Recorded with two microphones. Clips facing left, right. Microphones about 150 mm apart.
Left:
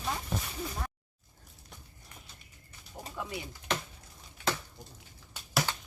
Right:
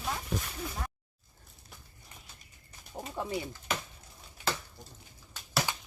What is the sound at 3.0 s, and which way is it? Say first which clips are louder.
Speech: right 4 dB; 25° right (ahead or behind).